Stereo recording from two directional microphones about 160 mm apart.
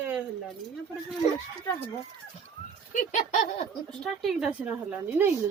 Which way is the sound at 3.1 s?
50° left (ahead or behind).